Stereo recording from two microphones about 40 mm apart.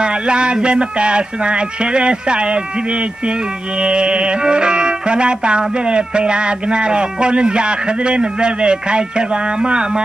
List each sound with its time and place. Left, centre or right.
0.0 s speech: right